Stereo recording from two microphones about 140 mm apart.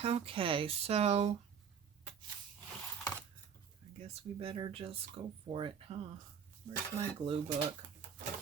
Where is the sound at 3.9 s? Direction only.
45° right (ahead or behind).